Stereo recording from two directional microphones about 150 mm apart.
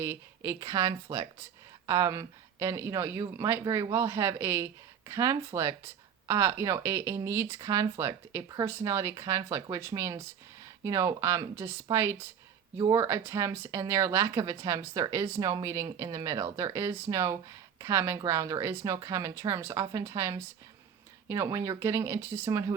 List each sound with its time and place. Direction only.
0.0 s speech: 20° right (ahead or behind)